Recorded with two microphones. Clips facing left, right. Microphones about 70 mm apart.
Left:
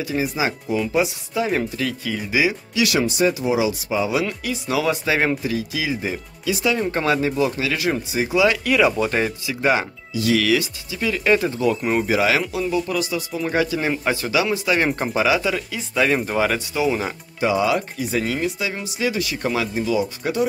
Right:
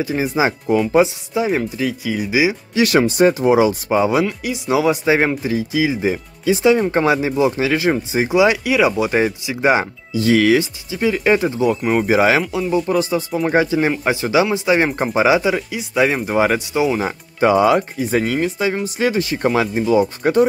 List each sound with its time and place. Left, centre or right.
0.0 s speech: right
1.8 s speech: centre
2.7 s speech: right
4.3 s speech: centre
6.8 s speech: centre
8.6 s speech: centre
9.5 s speech: right
12.0 s speech: right
17.4 s speech: right